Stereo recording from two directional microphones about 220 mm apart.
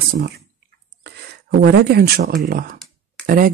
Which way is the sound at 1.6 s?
45° right (ahead or behind).